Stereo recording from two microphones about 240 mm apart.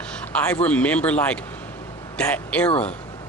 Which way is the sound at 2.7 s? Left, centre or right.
Left.